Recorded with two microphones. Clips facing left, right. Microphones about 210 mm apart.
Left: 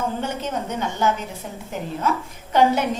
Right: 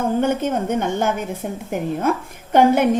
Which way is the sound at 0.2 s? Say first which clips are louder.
Right 7 dB; 55° right (ahead or behind).